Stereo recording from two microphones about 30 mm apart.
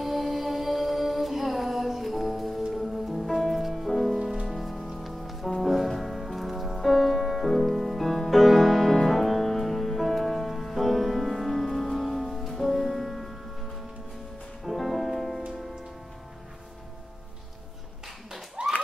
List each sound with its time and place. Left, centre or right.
0.0 s music: centre
6.8 s music: centre
7.2 s music: centre
14.6 s music: centre
18.6 s a sound: right